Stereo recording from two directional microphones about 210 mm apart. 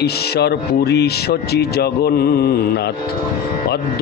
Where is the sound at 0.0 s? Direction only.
50° left (ahead or behind).